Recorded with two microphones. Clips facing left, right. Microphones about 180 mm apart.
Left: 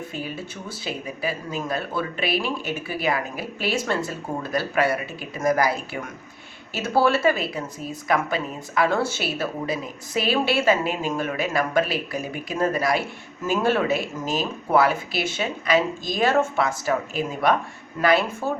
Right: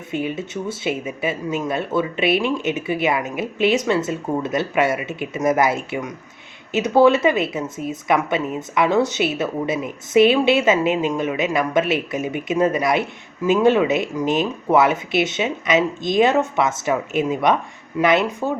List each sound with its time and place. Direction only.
0.1 s speech: 20° right (ahead or behind)